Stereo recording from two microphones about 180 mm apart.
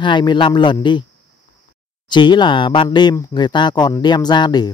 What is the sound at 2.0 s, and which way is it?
Speech, 25° left (ahead or behind).